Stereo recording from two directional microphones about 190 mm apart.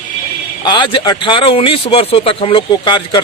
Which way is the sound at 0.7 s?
25° left (ahead or behind).